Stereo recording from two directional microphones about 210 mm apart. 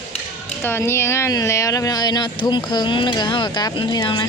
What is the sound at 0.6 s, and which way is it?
Speech, 10° left (ahead or behind).